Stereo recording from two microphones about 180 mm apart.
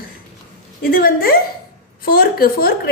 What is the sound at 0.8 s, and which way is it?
Speech, 55° left (ahead or behind).